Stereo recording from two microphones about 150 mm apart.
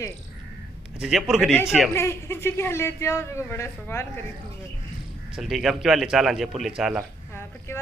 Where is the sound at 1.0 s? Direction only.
Centre (ahead or behind).